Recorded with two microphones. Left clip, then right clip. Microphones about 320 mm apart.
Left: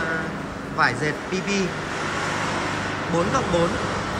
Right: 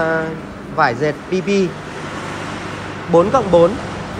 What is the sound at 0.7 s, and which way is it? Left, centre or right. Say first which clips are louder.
Speech: right 6 dB; centre.